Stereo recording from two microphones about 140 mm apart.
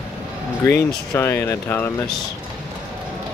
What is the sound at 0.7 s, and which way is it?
Speech, 20° left (ahead or behind).